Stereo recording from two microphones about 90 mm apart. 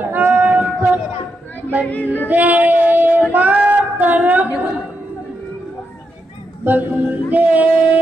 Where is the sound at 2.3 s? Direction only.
20° right (ahead or behind).